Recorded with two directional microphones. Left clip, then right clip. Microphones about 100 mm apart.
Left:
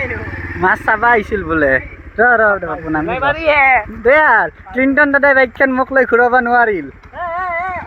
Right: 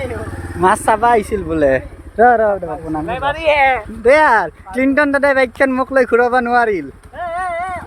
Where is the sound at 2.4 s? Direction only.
45° right (ahead or behind).